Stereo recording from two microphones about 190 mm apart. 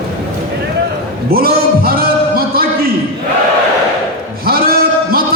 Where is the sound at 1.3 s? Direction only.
50° right (ahead or behind).